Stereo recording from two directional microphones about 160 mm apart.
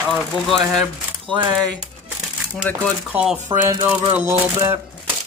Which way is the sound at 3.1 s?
5° right (ahead or behind).